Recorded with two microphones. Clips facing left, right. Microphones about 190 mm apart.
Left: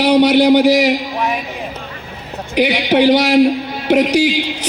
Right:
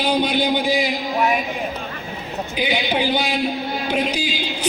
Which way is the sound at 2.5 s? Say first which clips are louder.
Left 9 dB; 75° left (ahead or behind).